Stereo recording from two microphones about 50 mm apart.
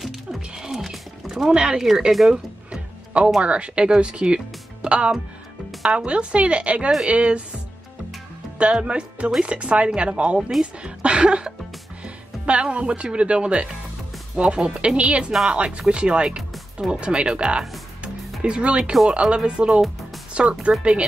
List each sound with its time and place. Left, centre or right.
0.0 s music: centre
1.5 s speech: centre
8.7 s speech: right
12.0 s music: right
12.6 s speech: right